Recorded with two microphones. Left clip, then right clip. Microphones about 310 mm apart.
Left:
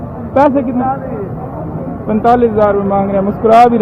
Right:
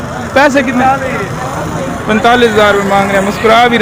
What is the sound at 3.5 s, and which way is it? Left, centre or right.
Speech, centre.